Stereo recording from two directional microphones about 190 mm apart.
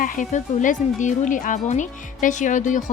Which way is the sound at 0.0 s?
45° left (ahead or behind).